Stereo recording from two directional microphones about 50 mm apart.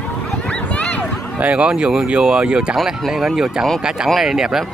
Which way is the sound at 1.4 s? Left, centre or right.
Right.